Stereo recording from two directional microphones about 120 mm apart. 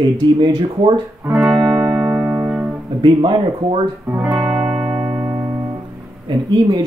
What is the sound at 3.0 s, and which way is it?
Speech, 45° right (ahead or behind).